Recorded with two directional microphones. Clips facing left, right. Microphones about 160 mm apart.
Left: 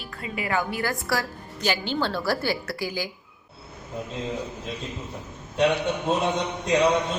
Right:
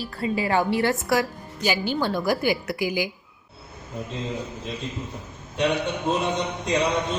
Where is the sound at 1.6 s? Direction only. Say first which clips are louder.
Right 2 dB; 10° right (ahead or behind).